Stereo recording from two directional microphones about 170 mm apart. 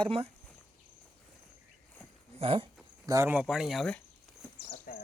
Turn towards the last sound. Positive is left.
turn(degrees=60)  # may be behind; listen again after turning